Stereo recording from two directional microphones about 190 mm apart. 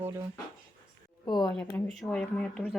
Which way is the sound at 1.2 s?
20° left (ahead or behind).